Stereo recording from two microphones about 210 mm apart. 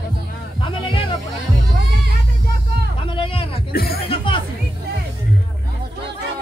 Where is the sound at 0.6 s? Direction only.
25° left (ahead or behind).